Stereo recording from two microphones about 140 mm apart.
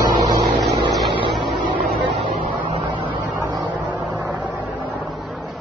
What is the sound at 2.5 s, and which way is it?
Vehicle, 35° right (ahead or behind).